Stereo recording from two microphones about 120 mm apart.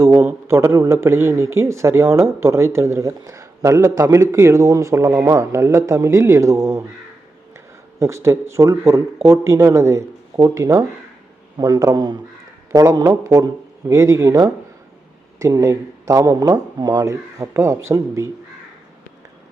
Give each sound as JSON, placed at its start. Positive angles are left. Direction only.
{"t": 0.0, "sound": "a man's voice", "side_deg": -25}